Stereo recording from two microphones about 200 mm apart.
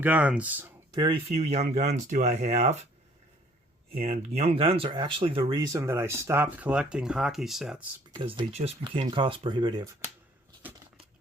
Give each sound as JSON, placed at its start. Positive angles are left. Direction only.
{"t": 0.0, "sound": "speech", "side_deg": -10}
{"t": 0.9, "sound": "speech", "side_deg": -30}
{"t": 4.0, "sound": "speech", "side_deg": -35}
{"t": 8.2, "sound": "speech", "side_deg": -25}
{"t": 10.6, "sound": "a sound", "side_deg": -10}